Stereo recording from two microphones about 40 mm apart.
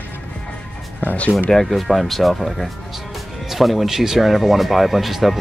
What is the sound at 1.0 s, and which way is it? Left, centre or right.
Speech, left.